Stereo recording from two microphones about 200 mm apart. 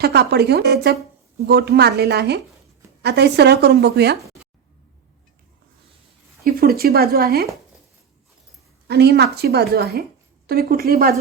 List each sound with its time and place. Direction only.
0.0 s a woman's voice: 55° right (ahead or behind)
6.4 s a woman's voice: 50° right (ahead or behind)
8.9 s a woman's voice: 55° right (ahead or behind)